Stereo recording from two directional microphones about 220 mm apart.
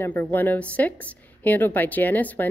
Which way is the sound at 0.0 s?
10° left (ahead or behind).